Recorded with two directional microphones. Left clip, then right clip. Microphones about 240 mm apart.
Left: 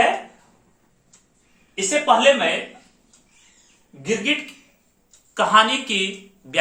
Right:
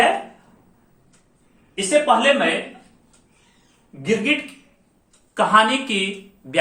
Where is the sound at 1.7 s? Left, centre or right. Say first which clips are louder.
Right 1 dB; centre.